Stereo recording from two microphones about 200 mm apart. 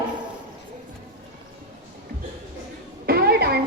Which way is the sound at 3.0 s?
50° right (ahead or behind).